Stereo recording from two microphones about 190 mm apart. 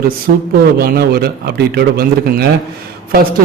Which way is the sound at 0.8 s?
55° right (ahead or behind).